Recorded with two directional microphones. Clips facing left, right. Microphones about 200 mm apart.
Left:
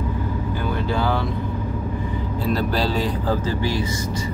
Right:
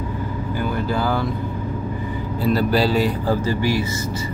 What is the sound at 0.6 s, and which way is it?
Vehicle, 5° right (ahead or behind).